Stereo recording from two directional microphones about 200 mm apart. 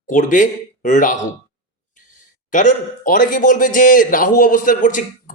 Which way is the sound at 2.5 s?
40° left (ahead or behind).